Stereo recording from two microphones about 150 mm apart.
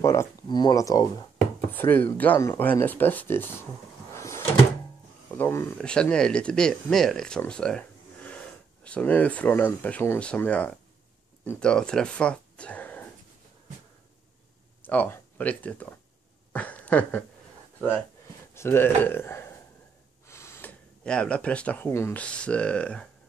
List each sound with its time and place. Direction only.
0.0 s speech: 20° left (ahead or behind)
1.7 s speech: 15° left (ahead or behind)
4.1 s drawer open or close: 20° left (ahead or behind)
5.4 s speech: 15° left (ahead or behind)
5.8 s speech: 5° left (ahead or behind)
14.8 s speech: 10° left (ahead or behind)
16.5 s a sound: 10° left (ahead or behind)
18.5 s speech: 15° left (ahead or behind)
20.2 s gasp: 15° left (ahead or behind)
21.0 s speech: 5° left (ahead or behind)